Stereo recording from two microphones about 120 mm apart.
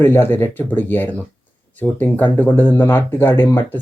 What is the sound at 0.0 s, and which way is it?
Speech, 20° left (ahead or behind).